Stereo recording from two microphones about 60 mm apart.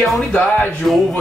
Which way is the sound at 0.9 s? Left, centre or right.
Centre.